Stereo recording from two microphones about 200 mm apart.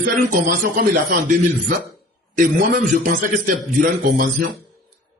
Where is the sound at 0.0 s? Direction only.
45° right (ahead or behind).